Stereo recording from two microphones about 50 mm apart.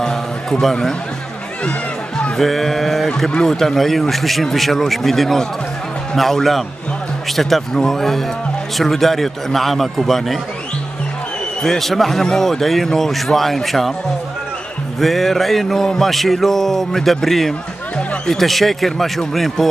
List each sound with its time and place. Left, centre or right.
0.0 s a sound: centre
1.6 s music: left
2.3 s sheep: centre
3.3 s music: centre
11.6 s music: centre
15.0 s music: centre